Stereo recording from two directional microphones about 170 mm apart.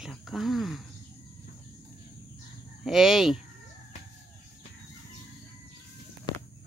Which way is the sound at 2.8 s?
Centre (ahead or behind).